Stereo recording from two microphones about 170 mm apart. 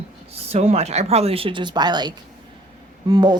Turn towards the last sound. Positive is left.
turn(degrees=-25)  # may be behind; listen again after turning